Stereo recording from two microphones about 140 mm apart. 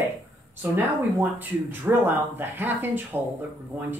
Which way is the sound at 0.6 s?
15° right (ahead or behind).